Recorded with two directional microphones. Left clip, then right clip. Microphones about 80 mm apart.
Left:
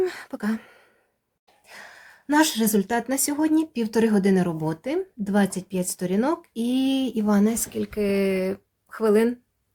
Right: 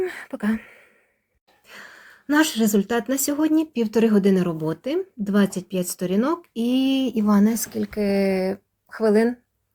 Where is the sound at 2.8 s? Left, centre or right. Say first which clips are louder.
Right 2 dB; left.